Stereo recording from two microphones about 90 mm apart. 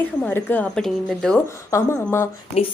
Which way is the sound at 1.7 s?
30° left (ahead or behind).